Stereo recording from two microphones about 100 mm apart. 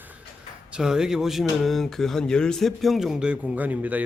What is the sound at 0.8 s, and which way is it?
Speech, 5° right (ahead or behind).